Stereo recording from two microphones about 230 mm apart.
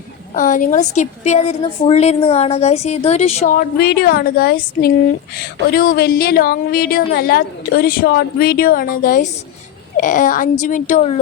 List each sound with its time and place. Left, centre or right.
0.3 s a woman's voice: left
3.5 s a woman's voice: left